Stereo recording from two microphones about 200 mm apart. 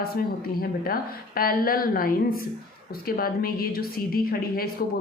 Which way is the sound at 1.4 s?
45° left (ahead or behind).